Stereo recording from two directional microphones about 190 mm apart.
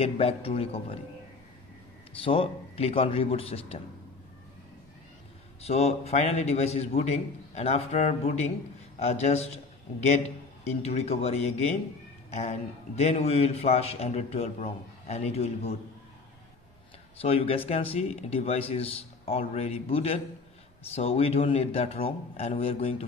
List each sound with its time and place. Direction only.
0.0 s a man's voice: 30° left (ahead or behind)
2.2 s a man's voice: 30° left (ahead or behind)
5.6 s a man's voice: 35° left (ahead or behind)
10.8 s a man's voice: 35° left (ahead or behind)
17.2 s a man's voice: 30° left (ahead or behind)